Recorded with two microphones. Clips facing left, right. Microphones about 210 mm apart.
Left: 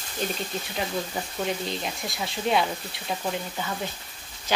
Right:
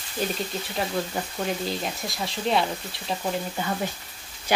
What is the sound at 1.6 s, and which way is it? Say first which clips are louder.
Speech: right 2 dB; centre (ahead or behind).